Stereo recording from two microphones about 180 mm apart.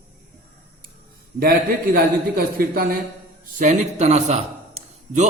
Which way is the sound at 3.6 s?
40° right (ahead or behind).